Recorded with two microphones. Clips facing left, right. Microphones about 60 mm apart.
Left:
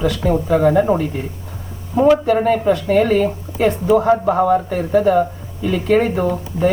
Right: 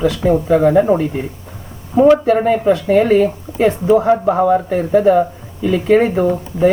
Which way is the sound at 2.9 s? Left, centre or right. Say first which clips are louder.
Right 3 dB; right.